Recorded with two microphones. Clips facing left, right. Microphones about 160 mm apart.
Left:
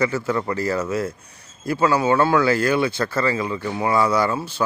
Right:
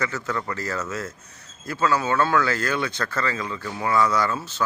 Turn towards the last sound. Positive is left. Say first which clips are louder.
# left 4 dB
turn(degrees=10)  # may be behind; listen again after turning